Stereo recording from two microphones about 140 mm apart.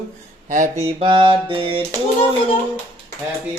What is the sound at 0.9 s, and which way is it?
Mantra, 40° right (ahead or behind).